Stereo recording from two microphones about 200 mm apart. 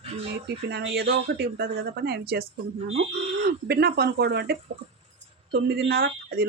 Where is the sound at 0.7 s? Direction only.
55° right (ahead or behind).